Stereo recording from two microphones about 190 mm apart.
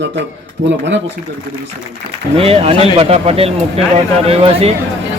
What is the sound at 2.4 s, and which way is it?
A man's voice, 30° right (ahead or behind).